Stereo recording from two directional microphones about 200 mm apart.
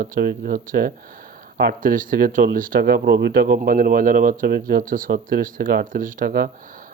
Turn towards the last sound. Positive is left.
turn(degrees=-45)  # may be behind; listen again after turning